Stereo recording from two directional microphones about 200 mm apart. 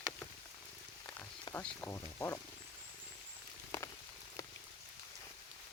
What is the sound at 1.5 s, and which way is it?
Speech, 10° left (ahead or behind).